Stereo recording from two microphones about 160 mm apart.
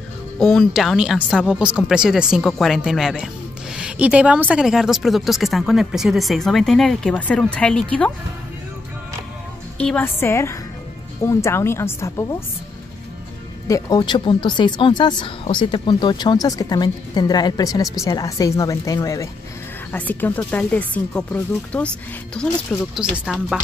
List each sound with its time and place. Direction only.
0.4 s speech: centre (ahead or behind)
9.8 s speech: 10° left (ahead or behind)
13.7 s speech: 20° left (ahead or behind)
19.9 s speech: 10° left (ahead or behind)